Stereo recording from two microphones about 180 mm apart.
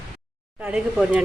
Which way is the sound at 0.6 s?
5° right (ahead or behind).